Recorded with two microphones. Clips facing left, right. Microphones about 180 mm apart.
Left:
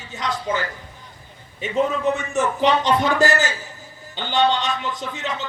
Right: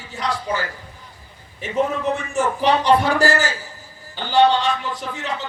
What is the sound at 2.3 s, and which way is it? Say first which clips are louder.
A man's voice: right 2 dB; 20° left (ahead or behind).